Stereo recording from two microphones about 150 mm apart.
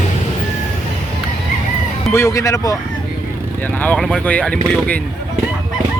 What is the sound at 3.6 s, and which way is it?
Speech, 10° left (ahead or behind).